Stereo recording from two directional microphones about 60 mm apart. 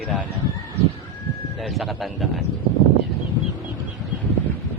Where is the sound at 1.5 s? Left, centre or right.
Centre.